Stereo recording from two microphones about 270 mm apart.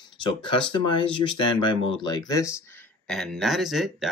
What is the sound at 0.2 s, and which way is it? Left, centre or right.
Speech, centre.